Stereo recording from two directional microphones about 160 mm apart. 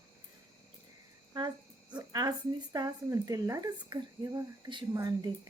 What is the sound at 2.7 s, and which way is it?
A child's voice, 25° right (ahead or behind).